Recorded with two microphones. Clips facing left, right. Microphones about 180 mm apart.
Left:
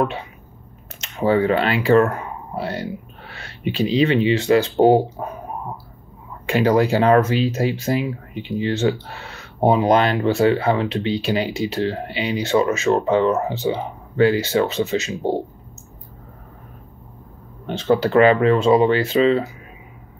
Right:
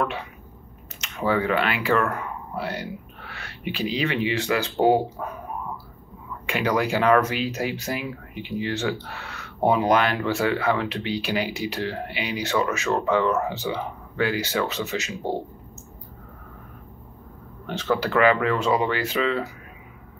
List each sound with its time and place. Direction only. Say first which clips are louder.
1.0 s speech: left 6 dB; 30° left (ahead or behind)
6.4 s speech: left 7 dB; 30° left (ahead or behind)
17.6 s speech: left 6 dB; 30° left (ahead or behind)